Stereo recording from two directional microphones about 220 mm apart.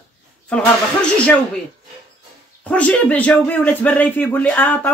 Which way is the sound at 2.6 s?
5° left (ahead or behind).